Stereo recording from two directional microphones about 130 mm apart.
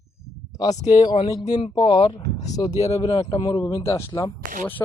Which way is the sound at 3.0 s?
30° left (ahead or behind).